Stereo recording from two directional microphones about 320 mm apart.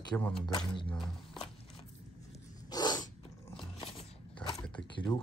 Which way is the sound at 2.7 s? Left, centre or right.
Centre.